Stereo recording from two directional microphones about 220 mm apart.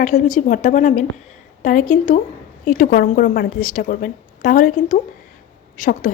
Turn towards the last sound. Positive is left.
turn(degrees=35)  # may be behind; listen again after turning